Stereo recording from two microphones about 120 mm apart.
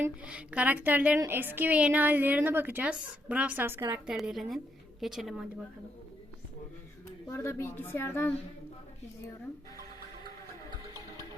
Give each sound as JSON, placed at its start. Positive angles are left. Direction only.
{"t": 0.0, "sound": "a woman's voice", "side_deg": -10}
{"t": 4.0, "sound": "a woman's voice", "side_deg": -5}
{"t": 7.3, "sound": "a woman's voice", "side_deg": 20}